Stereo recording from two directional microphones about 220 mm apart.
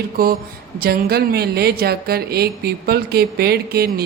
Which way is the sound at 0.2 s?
40° right (ahead or behind).